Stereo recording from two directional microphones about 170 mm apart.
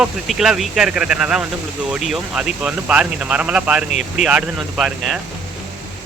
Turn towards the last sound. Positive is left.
turn(degrees=0)  # may be behind; listen again after turning